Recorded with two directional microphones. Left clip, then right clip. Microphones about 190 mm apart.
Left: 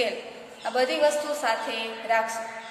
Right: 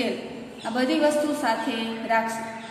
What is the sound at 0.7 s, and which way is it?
A woman's voice, 20° left (ahead or behind).